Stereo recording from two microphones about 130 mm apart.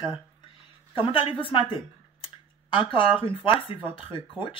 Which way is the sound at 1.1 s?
40° left (ahead or behind).